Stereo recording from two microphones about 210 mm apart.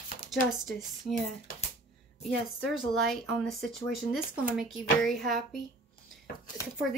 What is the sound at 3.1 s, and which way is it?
Speech, centre (ahead or behind).